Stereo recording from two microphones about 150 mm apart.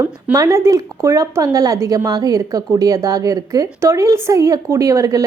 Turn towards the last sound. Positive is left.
turn(degrees=-20)  # may be behind; listen again after turning